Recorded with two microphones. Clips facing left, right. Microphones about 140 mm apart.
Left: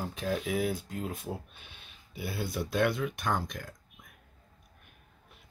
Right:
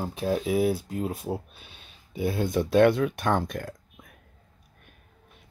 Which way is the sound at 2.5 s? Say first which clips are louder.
Right 10 dB; 90° right.